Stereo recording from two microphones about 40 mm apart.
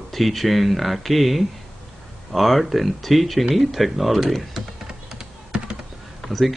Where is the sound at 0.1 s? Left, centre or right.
Centre.